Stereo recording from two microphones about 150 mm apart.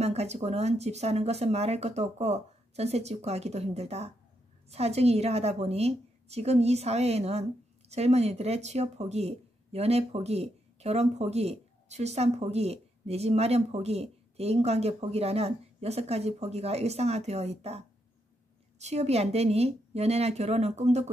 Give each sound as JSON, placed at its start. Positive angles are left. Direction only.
{"t": 0.0, "sound": "speech", "side_deg": -45}